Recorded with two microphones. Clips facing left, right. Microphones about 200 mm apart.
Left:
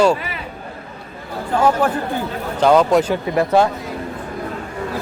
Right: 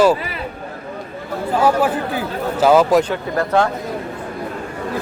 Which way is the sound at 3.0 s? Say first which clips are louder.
Left 2 dB; 10° left (ahead or behind).